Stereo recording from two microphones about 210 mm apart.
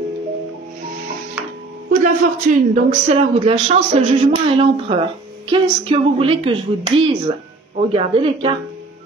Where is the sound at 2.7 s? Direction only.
30° right (ahead or behind).